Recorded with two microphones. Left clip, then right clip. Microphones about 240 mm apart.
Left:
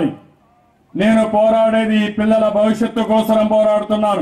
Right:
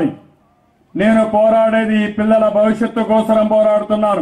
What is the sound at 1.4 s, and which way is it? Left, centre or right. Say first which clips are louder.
A man's voice: right 1 dB; centre.